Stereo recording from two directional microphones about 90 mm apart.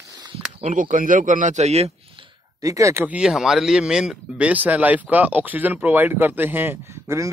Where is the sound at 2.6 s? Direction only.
35° right (ahead or behind).